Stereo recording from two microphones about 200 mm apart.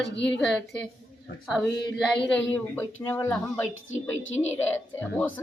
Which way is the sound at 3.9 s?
75° left (ahead or behind).